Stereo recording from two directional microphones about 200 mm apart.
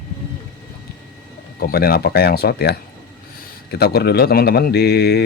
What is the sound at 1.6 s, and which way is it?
Speech, 50° left (ahead or behind).